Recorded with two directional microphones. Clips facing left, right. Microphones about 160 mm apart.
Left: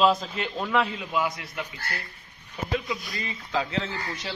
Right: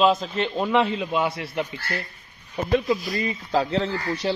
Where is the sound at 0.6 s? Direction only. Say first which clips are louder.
Right 4 dB; 25° right (ahead or behind); by 2.7 s 40° right (ahead or behind).